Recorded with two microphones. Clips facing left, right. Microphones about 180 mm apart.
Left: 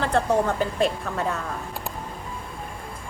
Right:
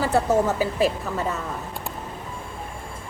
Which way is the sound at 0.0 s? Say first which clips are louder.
Right 1 dB; 5° right (ahead or behind).